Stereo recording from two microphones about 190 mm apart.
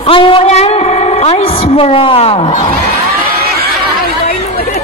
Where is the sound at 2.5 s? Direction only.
40° left (ahead or behind).